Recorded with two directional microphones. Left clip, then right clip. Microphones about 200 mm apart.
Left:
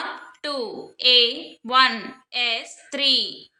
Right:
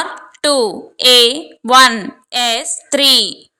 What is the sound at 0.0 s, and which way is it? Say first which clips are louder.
A woman's voice: right 12 dB; 55° right (ahead or behind).